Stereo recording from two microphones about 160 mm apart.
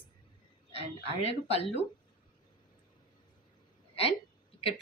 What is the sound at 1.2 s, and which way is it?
Speech, 40° left (ahead or behind).